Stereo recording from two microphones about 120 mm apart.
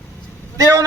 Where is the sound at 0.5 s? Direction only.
25° right (ahead or behind).